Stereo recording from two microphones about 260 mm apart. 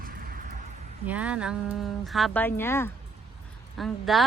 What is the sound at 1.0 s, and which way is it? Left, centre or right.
A woman's voice, centre.